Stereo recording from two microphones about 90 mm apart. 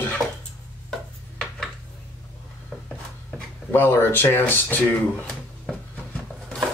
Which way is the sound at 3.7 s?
25° left (ahead or behind).